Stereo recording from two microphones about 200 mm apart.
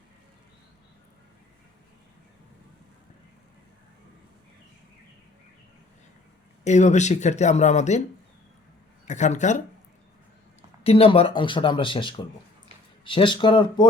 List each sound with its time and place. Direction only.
6.7 s speech: 35° left (ahead or behind)
9.0 s speech: 35° left (ahead or behind)
10.8 s speech: 30° left (ahead or behind)